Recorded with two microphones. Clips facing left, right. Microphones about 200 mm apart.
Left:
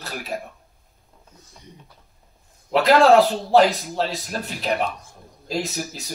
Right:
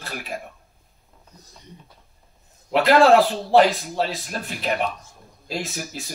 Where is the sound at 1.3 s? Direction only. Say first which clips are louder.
Right 2 dB; 35° right (ahead or behind).